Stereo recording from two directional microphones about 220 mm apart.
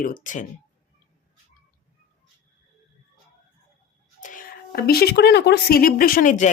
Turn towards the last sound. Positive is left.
turn(degrees=35)  # may be behind; listen again after turning